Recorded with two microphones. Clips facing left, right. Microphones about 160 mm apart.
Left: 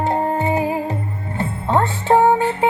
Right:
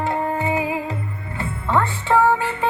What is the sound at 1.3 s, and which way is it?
Speech, 40° left (ahead or behind).